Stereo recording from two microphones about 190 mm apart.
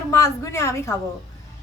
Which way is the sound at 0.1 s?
15° left (ahead or behind).